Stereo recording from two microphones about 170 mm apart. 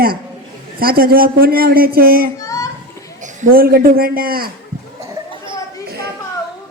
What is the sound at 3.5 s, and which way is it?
A man's voice, 60° right (ahead or behind).